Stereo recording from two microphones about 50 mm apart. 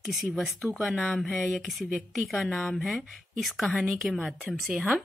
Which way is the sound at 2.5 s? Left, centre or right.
Centre.